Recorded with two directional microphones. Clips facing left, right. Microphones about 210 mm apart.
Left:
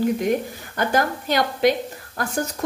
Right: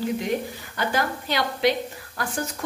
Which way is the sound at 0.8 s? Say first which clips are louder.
Left 4 dB; 45° left (ahead or behind).